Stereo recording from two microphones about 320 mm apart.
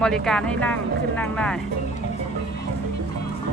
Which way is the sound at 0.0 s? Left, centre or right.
Centre.